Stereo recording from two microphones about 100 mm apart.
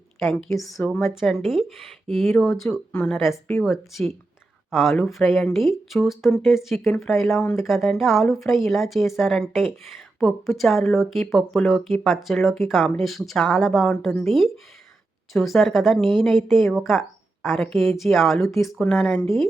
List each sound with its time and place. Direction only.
0.2 s speech: 5° left (ahead or behind)
0.8 s speech: 20° left (ahead or behind)
1.1 s a woman's voice: 5° right (ahead or behind)